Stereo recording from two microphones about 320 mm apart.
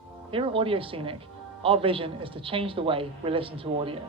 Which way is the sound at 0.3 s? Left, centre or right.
Centre.